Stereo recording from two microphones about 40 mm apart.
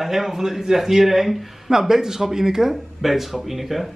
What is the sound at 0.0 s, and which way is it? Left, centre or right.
A man's voice, centre.